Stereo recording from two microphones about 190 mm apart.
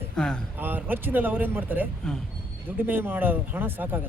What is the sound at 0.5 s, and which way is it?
Speech, 10° right (ahead or behind).